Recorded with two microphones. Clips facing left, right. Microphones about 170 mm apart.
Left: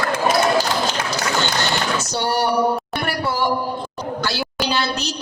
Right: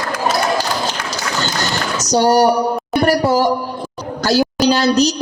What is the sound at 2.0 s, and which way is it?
A woman's voice, 40° right (ahead or behind).